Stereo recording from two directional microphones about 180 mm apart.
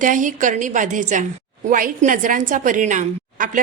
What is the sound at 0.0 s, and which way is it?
A woman's voice, 45° right (ahead or behind).